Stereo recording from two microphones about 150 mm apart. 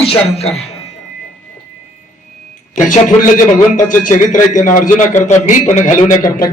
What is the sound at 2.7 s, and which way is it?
A man's voice, 60° left (ahead or behind).